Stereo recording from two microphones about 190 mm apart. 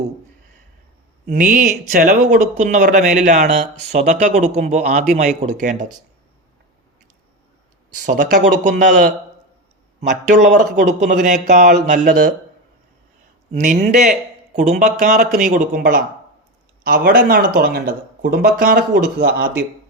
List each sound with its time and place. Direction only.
1.3 s speech: 45° right (ahead or behind)
8.0 s speech: 45° right (ahead or behind)
10.4 s speech: 45° right (ahead or behind)
13.5 s speech: 40° right (ahead or behind)